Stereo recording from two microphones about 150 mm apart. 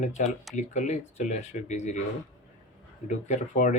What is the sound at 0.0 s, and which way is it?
Speech, 50° left (ahead or behind).